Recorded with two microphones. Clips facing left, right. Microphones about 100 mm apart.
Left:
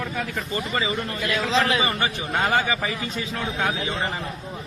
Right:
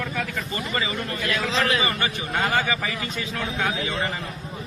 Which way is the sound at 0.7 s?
20° left (ahead or behind).